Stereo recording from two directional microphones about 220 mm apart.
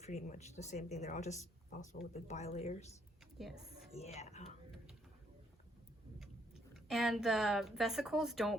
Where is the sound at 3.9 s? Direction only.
30° left (ahead or behind).